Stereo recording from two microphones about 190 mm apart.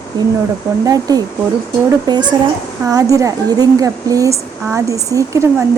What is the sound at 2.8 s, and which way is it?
Speech, 20° right (ahead or behind).